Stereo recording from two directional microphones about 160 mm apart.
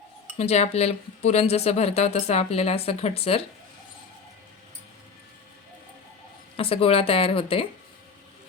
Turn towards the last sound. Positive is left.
turn(degrees=35)  # may be behind; listen again after turning